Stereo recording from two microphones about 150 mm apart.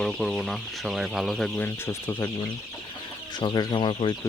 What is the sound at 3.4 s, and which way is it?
Speech, 30° left (ahead or behind).